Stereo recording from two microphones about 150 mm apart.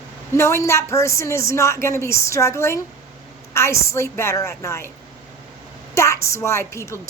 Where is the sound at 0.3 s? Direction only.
15° left (ahead or behind).